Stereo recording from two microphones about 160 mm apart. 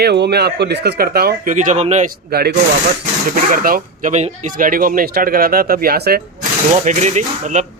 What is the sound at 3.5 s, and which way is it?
Speech, 60° right (ahead or behind).